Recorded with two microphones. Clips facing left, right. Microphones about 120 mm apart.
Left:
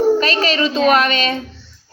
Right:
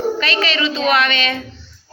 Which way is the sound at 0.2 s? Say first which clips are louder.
Left 3 dB; 40° left (ahead or behind).